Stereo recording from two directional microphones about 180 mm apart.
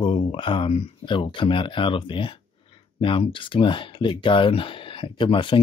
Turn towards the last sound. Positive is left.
turn(degrees=30)  # may be behind; listen again after turning